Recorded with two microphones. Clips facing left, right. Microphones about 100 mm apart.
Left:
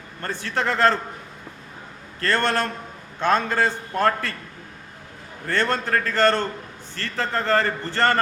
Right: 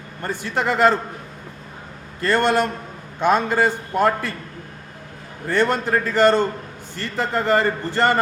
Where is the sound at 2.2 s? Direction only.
15° right (ahead or behind).